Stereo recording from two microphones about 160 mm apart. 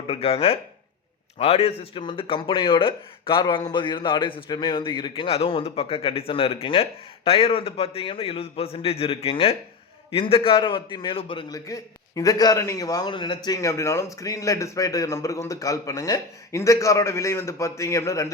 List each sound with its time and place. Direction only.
0.1 s a man's voice: 35° left (ahead or behind); by 18.3 s 20° left (ahead or behind)